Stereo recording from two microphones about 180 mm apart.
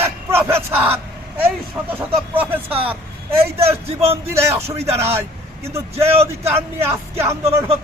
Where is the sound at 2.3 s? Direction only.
10° right (ahead or behind).